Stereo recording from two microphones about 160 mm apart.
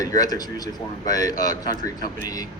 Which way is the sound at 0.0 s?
25° left (ahead or behind).